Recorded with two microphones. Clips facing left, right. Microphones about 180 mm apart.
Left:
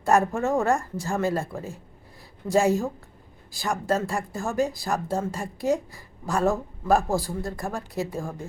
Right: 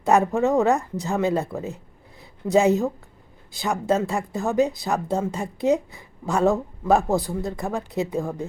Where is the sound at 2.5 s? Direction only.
20° right (ahead or behind).